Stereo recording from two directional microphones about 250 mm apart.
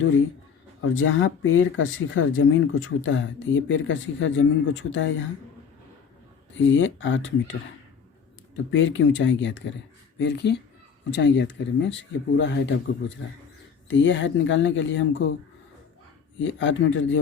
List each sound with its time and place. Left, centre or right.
0.8 s speech: left
6.6 s speech: left
8.7 s speech: left
16.4 s speech: left